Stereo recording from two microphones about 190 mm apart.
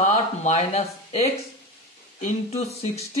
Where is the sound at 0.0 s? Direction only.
40° left (ahead or behind).